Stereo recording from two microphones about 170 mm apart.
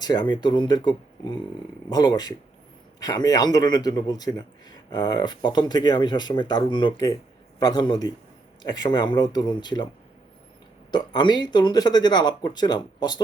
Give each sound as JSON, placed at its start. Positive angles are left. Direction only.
{"t": 0.0, "sound": "speech", "side_deg": 25}
{"t": 10.9, "sound": "speech", "side_deg": 25}